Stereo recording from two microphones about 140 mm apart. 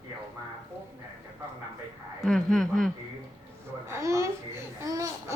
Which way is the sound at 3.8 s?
20° right (ahead or behind).